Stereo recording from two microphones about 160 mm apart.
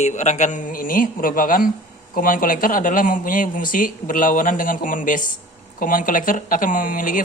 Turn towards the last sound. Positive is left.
turn(degrees=55)  # may be behind; listen again after turning